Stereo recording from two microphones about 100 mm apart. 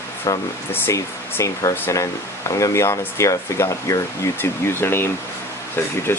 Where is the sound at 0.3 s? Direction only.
40° left (ahead or behind).